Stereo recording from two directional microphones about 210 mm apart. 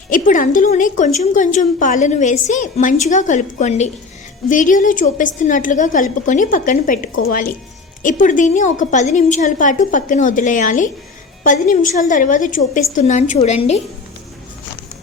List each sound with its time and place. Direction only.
0.1 s a woman's voice: 40° left (ahead or behind)